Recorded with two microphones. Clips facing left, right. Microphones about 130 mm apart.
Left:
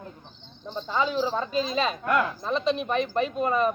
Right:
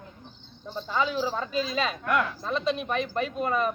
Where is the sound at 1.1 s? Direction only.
10° right (ahead or behind).